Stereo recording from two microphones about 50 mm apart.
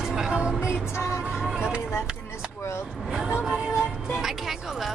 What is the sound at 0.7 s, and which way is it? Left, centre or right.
Music, left.